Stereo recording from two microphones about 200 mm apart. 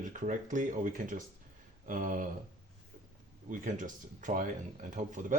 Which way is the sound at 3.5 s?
40° right (ahead or behind).